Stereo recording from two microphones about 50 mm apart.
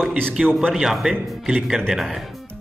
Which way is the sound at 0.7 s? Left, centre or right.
Centre.